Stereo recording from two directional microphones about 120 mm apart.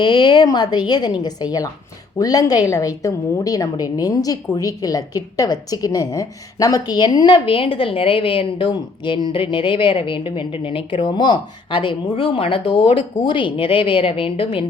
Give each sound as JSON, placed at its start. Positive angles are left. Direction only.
{"t": 0.0, "sound": "a woman's voice", "side_deg": 40}